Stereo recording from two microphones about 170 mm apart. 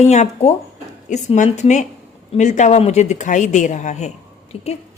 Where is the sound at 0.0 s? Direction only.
40° left (ahead or behind).